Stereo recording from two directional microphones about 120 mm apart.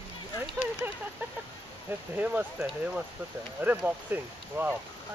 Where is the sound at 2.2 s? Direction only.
15° right (ahead or behind).